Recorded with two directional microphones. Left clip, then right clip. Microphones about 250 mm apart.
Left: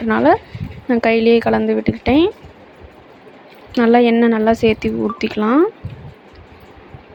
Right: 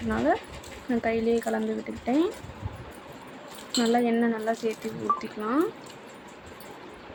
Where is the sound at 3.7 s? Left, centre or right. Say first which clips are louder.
Left 12 dB; left.